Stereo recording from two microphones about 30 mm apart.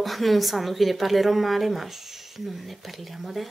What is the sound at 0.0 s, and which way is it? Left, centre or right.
A woman's voice, centre.